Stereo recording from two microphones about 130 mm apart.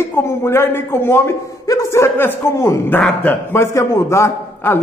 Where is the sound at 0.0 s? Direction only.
20° left (ahead or behind).